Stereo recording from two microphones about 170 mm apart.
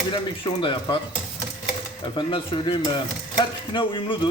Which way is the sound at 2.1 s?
30° left (ahead or behind).